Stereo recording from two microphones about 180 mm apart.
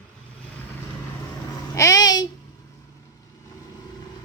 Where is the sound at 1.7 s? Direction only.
20° left (ahead or behind).